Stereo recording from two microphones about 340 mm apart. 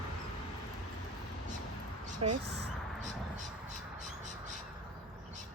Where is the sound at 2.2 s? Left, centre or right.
Centre.